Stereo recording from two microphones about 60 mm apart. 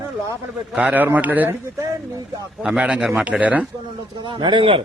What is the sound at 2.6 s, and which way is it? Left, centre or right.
A man's voice, centre.